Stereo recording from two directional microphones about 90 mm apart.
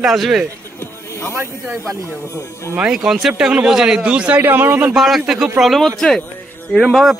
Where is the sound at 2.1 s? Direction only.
30° left (ahead or behind).